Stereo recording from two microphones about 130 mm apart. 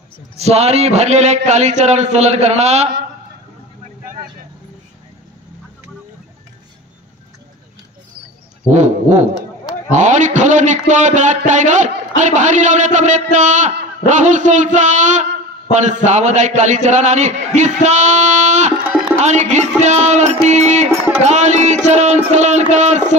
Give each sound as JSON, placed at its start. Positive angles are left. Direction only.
{"t": 0.4, "sound": "a man's voice", "side_deg": -55}
{"t": 8.6, "sound": "a man's voice", "side_deg": -65}
{"t": 20.4, "sound": "music", "side_deg": -65}
{"t": 21.2, "sound": "a sound", "side_deg": -65}